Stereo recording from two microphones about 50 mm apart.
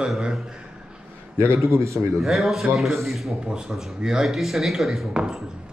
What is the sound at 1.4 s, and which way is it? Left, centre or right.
Speech, right.